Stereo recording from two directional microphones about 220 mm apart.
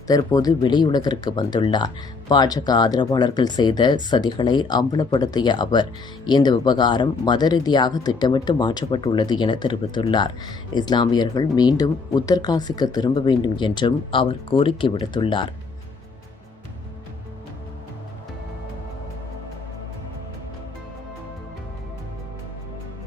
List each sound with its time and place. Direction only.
0.1 s speech: 15° left (ahead or behind)